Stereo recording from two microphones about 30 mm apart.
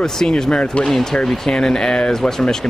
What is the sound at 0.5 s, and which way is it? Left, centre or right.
Speech, left.